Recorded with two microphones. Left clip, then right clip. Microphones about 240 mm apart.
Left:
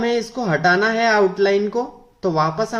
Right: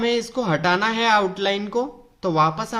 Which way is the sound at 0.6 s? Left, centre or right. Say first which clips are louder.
Left 5 dB; right.